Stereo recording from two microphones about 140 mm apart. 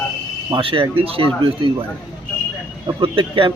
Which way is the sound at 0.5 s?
40° right (ahead or behind).